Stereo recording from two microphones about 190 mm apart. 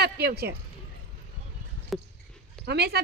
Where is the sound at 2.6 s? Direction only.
55° right (ahead or behind).